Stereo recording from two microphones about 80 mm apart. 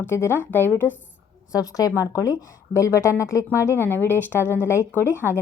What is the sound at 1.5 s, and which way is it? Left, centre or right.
A woman's voice, left.